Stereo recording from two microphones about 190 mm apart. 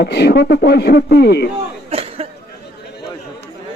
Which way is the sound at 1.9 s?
30° right (ahead or behind).